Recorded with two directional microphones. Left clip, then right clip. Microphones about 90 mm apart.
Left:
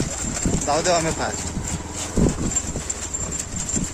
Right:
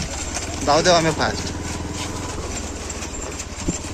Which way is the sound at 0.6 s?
15° left (ahead or behind).